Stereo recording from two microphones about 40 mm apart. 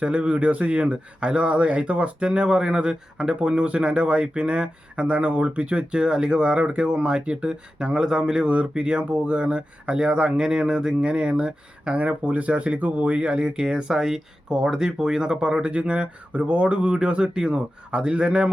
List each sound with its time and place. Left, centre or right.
0.0 s speech: right
12.2 s speech: right